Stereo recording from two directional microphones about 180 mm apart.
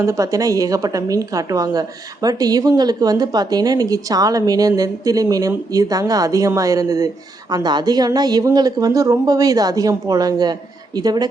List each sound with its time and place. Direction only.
0.0 s a woman's voice: 15° right (ahead or behind)